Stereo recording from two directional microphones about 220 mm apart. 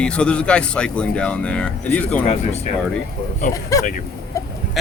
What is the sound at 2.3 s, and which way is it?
Speech, 30° left (ahead or behind).